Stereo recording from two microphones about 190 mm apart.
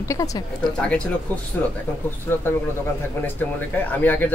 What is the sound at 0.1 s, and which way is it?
Speech, 15° left (ahead or behind).